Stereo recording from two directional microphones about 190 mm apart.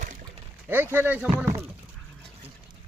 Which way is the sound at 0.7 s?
10° right (ahead or behind).